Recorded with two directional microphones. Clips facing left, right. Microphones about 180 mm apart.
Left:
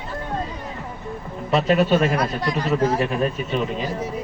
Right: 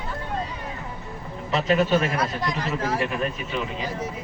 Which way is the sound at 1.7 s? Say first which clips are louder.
Left 2 dB; 35° left (ahead or behind).